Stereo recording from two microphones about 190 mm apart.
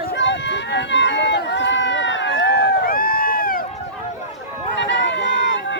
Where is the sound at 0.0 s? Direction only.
65° left (ahead or behind).